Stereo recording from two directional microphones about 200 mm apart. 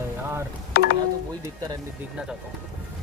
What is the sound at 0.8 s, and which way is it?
Speech, 50° left (ahead or behind).